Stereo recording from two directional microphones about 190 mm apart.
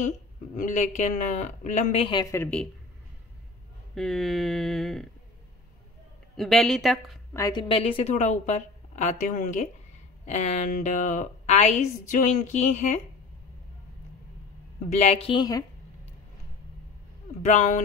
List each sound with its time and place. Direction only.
0.6 s a woman's voice: 40° left (ahead or behind)
2.3 s a woman's voice: 10° left (ahead or behind)
3.9 s speech: centre (ahead or behind)
6.3 s speech: centre (ahead or behind)
7.3 s a woman's voice: 20° left (ahead or behind); by 13.0 s 40° left (ahead or behind)
14.9 s a woman's voice: 30° left (ahead or behind)
17.4 s a woman's voice: 40° left (ahead or behind)